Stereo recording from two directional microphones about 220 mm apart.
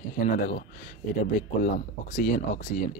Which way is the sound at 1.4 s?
40° left (ahead or behind).